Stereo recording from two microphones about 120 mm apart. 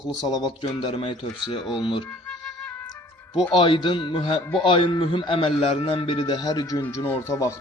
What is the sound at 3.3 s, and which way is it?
A man's voice, 45° left (ahead or behind).